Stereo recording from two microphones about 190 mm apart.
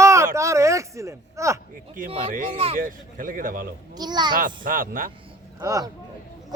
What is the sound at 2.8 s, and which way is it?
Speech, 45° right (ahead or behind).